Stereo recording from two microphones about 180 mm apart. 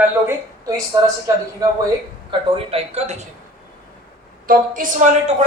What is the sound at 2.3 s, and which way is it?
Speech, 30° right (ahead or behind).